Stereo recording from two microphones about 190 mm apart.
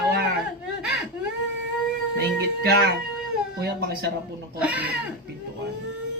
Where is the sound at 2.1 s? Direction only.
60° right (ahead or behind).